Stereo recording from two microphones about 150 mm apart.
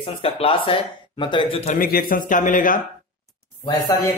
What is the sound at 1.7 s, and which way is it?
Speech, 75° left (ahead or behind).